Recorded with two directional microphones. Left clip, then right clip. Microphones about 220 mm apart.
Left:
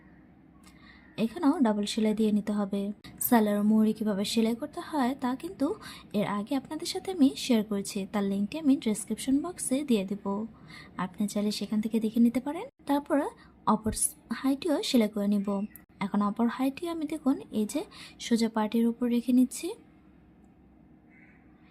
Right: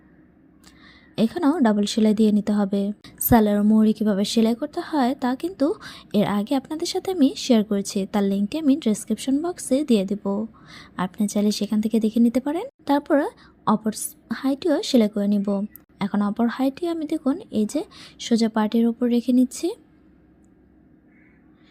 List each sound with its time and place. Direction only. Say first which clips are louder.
0.9 s a woman's voice: right 9 dB; 25° right (ahead or behind)